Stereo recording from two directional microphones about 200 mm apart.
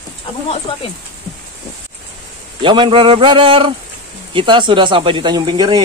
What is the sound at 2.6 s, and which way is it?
Speech, 25° right (ahead or behind).